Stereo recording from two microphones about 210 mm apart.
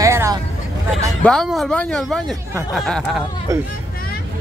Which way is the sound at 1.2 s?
Centre (ahead or behind).